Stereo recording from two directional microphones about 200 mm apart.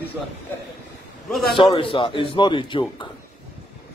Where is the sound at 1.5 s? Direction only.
25° left (ahead or behind).